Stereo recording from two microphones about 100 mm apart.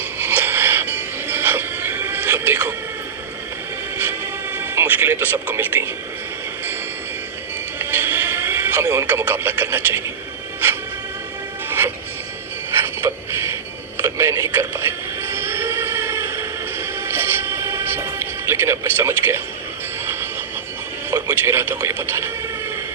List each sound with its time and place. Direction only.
0.2 s a sound: 20° right (ahead or behind)
1.3 s television: 20° right (ahead or behind)
4.5 s music: 25° right (ahead or behind)
7.8 s vehicle: 20° right (ahead or behind)
8.8 s radio: 25° right (ahead or behind)
13.1 s a sound: 25° right (ahead or behind)
14.0 s music: 30° right (ahead or behind)
21.1 s radio: 30° right (ahead or behind)